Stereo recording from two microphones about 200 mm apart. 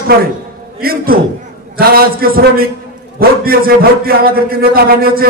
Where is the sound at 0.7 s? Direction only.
50° right (ahead or behind).